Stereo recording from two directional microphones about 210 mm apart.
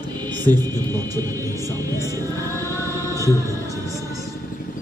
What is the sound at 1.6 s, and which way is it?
Speech, 15° right (ahead or behind).